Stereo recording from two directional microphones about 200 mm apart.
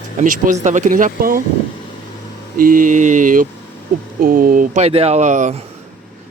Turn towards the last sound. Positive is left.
turn(degrees=-35)  # may be behind; listen again after turning